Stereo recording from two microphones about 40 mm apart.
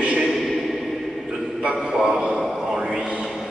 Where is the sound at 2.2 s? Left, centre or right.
Centre.